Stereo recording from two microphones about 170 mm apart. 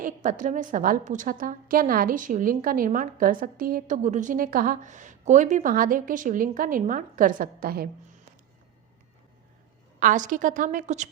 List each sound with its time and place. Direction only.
0.0 s a woman's voice: 50° right (ahead or behind)
10.0 s a woman's voice: 50° right (ahead or behind)